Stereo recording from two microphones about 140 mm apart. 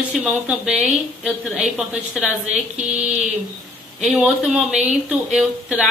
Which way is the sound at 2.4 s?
55° right (ahead or behind).